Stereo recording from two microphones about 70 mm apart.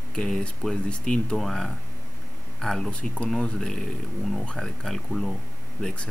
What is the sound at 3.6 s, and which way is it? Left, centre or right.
Speech, centre.